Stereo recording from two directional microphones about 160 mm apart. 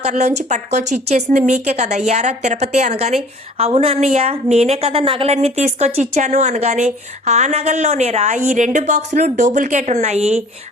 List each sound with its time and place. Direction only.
0.0 s a woman's voice: 45° right (ahead or behind)